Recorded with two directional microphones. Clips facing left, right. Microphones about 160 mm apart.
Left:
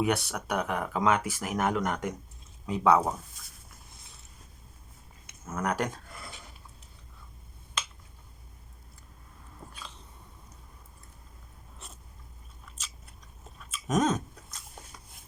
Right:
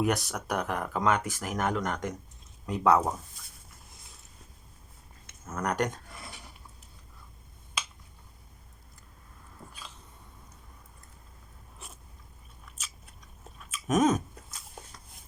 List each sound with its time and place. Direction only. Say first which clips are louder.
0.0 s speech: even; centre (ahead or behind)
5.2 s speech: left 1 dB; 5° left (ahead or behind)
13.7 s chewing: right 2 dB; centre (ahead or behind)